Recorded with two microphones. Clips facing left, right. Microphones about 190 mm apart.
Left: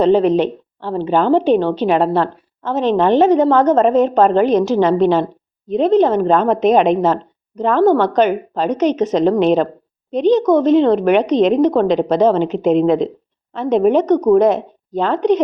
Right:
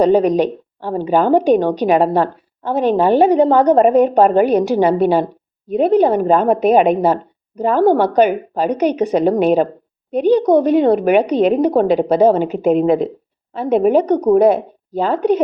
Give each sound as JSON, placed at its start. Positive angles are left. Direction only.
{"t": 0.2, "sound": "a woman's voice", "side_deg": -40}
{"t": 0.4, "sound": "a woman's voice", "side_deg": -15}